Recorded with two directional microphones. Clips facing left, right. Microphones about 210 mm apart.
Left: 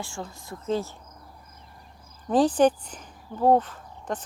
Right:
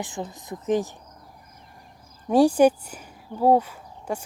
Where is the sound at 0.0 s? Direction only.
20° right (ahead or behind).